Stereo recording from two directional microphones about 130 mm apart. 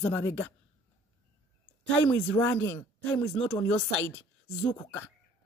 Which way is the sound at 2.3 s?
15° left (ahead or behind).